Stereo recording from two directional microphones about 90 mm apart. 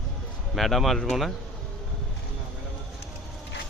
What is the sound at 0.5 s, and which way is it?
Speech, centre (ahead or behind).